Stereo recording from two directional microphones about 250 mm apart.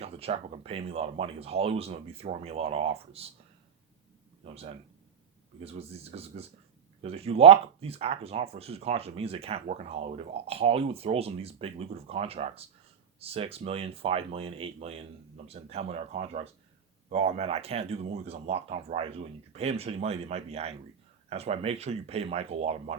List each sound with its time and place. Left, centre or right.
0.0 s speech: right
4.4 s speech: right